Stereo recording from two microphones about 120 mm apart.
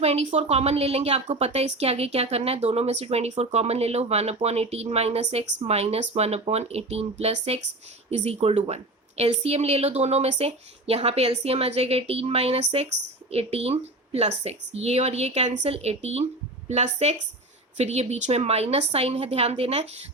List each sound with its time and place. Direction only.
0.0 s a woman's voice: 60° right (ahead or behind)